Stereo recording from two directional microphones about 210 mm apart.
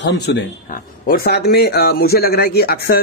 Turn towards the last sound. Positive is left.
turn(degrees=45)  # may be behind; listen again after turning